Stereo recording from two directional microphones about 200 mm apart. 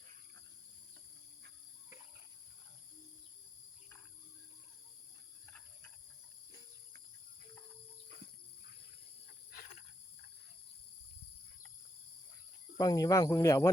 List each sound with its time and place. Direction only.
12.7 s speech: 20° left (ahead or behind)